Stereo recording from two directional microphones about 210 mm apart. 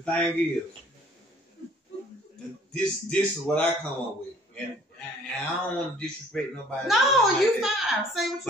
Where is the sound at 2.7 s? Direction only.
5° left (ahead or behind).